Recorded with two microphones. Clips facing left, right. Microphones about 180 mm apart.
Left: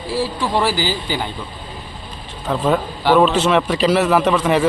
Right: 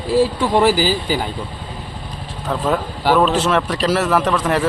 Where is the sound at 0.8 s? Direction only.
5° right (ahead or behind).